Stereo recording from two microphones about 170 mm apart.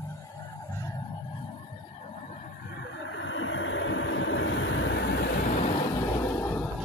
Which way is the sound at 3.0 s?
90° left.